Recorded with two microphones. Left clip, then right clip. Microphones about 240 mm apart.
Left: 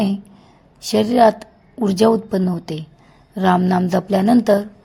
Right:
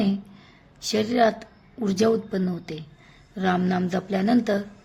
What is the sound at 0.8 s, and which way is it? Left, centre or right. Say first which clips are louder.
A woman's voice: left 7 dB; left.